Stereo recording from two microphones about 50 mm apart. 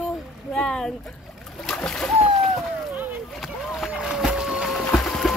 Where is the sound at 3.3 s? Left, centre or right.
Centre.